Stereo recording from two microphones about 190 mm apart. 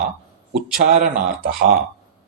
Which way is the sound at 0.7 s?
50° right (ahead or behind).